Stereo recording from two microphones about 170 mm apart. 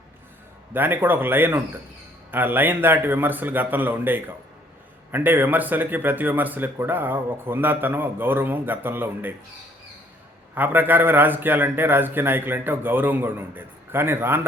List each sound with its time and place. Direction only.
0.7 s speech: 10° right (ahead or behind)
10.5 s speech: 10° right (ahead or behind)